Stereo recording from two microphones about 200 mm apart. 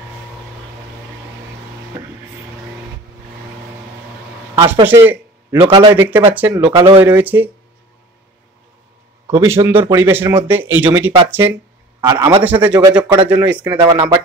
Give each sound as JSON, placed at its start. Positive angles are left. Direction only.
{"t": 4.8, "sound": "a sound", "side_deg": -10}
{"t": 5.6, "sound": "a man's voice", "side_deg": -20}
{"t": 5.9, "sound": "speech", "side_deg": -10}
{"t": 9.3, "sound": "a man's voice", "side_deg": -15}
{"t": 13.7, "sound": "a man's voice", "side_deg": -20}